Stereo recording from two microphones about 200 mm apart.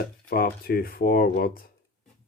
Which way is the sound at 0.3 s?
45° left (ahead or behind).